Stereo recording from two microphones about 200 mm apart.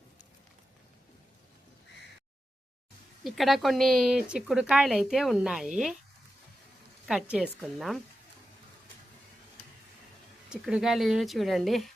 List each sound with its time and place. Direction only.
3.2 s speech: centre (ahead or behind)
7.1 s speech: 5° right (ahead or behind)
10.5 s speech: 5° right (ahead or behind)